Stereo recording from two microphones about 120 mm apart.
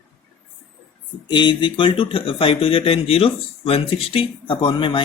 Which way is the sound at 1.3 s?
40° left (ahead or behind).